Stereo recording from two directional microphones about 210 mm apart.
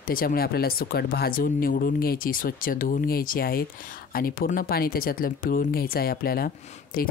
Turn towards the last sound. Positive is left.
turn(degrees=45)  # may be behind; listen again after turning